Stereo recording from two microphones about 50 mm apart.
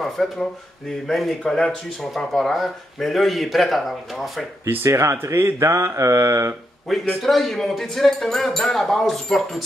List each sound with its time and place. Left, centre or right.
0.2 s speech: centre
1.3 s speech: centre
4.8 s speech: right
7.2 s speech: centre